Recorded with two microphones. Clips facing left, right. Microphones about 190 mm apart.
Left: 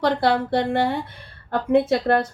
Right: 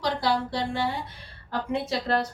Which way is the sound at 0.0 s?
60° left (ahead or behind).